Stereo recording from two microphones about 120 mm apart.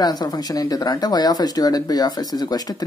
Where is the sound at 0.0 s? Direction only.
35° left (ahead or behind).